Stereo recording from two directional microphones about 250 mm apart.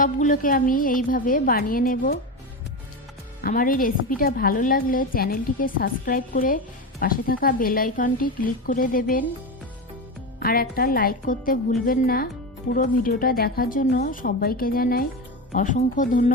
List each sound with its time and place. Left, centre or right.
0.0 s a woman's voice: left
3.4 s a woman's voice: left
10.4 s a woman's voice: left